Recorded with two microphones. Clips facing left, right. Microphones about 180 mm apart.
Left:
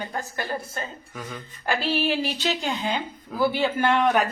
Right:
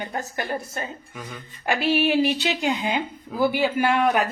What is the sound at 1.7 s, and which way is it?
Speech, 10° right (ahead or behind).